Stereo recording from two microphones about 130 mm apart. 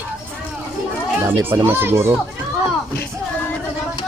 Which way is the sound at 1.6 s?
15° right (ahead or behind).